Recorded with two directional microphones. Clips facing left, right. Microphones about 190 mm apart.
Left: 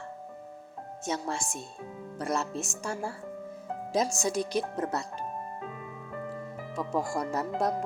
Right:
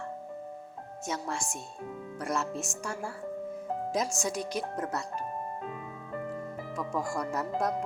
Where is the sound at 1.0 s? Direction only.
25° left (ahead or behind).